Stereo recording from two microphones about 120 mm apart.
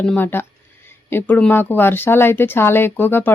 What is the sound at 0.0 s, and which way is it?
Speech, 10° left (ahead or behind).